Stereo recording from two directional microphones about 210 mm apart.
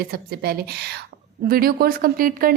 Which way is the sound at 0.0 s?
45° right (ahead or behind).